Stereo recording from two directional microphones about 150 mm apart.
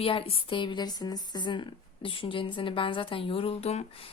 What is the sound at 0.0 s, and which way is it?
A woman's voice, 40° left (ahead or behind).